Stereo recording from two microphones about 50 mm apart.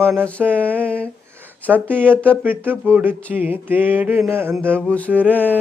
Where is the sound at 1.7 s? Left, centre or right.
Right.